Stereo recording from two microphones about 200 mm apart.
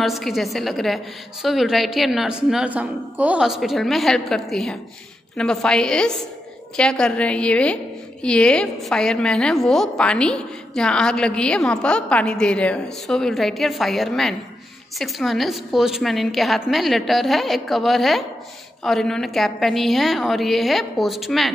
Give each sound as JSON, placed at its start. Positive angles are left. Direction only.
{"t": 0.0, "sound": "a woman's voice", "side_deg": 0}